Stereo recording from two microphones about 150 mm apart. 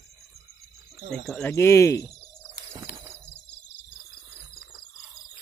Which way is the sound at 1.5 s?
20° left (ahead or behind).